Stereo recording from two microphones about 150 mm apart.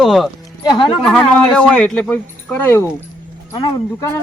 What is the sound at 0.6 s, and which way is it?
Speech, 30° left (ahead or behind).